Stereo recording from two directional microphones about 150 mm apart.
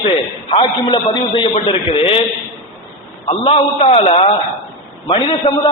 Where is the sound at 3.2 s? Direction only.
40° left (ahead or behind).